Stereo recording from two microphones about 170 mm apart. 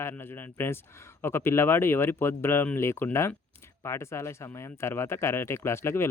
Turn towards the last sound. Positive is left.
turn(degrees=15)  # may be behind; listen again after turning